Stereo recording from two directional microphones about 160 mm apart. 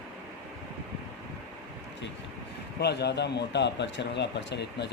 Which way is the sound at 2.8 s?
90° left.